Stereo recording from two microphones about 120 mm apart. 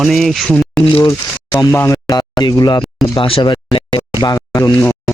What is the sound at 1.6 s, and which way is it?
Speech, 25° left (ahead or behind).